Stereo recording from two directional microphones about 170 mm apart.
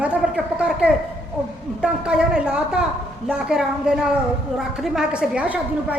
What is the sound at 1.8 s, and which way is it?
A woman's voice, 5° right (ahead or behind).